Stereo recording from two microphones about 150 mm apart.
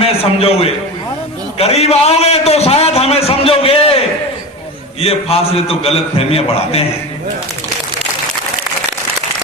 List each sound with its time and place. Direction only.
0.0 s a man's voice: 40° left (ahead or behind)